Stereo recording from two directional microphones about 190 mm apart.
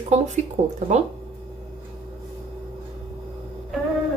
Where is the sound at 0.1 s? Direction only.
35° right (ahead or behind).